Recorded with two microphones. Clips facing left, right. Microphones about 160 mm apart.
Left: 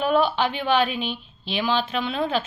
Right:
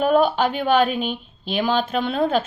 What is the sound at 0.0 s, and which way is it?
Speech, 45° right (ahead or behind).